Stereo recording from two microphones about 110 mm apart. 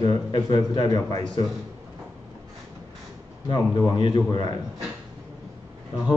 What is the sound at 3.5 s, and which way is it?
A man's voice, 35° left (ahead or behind).